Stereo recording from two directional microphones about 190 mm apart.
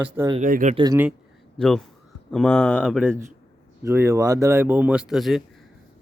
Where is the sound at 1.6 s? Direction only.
5° left (ahead or behind).